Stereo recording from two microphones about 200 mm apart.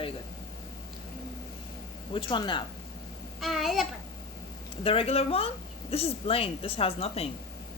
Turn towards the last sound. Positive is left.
turn(degrees=30)  # may be behind; listen again after turning